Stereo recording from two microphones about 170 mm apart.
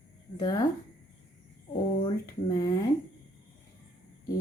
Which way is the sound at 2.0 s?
25° left (ahead or behind).